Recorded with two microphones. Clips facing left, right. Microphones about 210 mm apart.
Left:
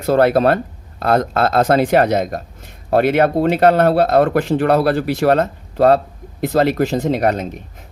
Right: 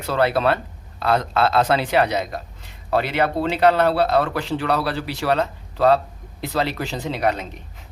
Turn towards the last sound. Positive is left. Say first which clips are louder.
# left 6 dB
turn(degrees=45)  # may be behind; listen again after turning